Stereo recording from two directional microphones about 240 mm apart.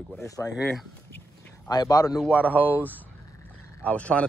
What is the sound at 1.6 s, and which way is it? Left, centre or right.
Speech, centre.